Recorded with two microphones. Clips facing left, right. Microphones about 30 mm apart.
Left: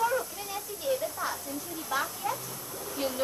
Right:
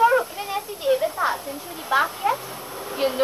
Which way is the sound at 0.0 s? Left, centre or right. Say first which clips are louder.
Right 11 dB; right.